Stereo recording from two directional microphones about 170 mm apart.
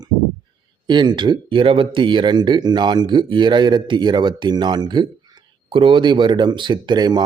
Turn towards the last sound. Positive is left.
turn(degrees=-25)  # may be behind; listen again after turning